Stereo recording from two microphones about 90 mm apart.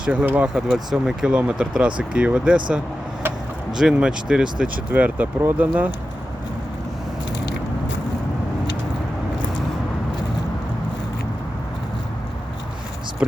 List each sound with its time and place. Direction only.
0.0 s speech: 15° right (ahead or behind)
3.7 s speech: 5° right (ahead or behind)